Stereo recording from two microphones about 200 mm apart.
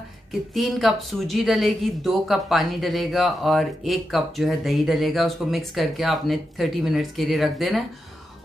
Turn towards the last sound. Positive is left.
turn(degrees=0)  # may be behind; listen again after turning